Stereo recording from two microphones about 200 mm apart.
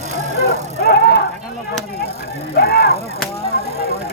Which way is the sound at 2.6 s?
50° left (ahead or behind).